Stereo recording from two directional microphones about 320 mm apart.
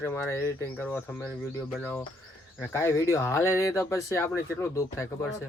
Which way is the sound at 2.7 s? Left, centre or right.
Centre.